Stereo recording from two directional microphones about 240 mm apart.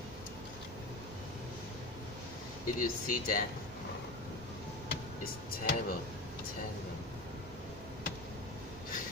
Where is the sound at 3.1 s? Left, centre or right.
Left.